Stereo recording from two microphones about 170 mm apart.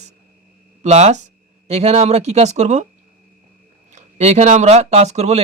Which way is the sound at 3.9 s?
40° right (ahead or behind).